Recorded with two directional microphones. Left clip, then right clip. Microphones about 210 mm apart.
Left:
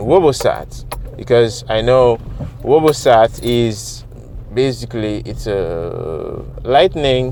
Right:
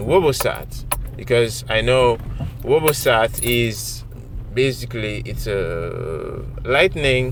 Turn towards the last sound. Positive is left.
turn(degrees=20)  # may be behind; listen again after turning